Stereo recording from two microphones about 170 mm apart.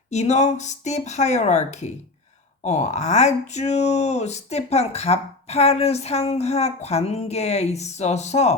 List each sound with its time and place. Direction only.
0.1 s speech: 40° left (ahead or behind)